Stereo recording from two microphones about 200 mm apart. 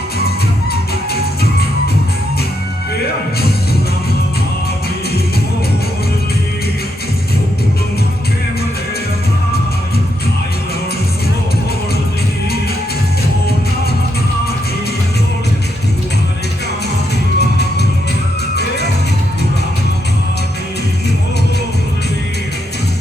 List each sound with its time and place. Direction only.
0.7 s music: 50° left (ahead or behind)
17.4 s music: 55° left (ahead or behind)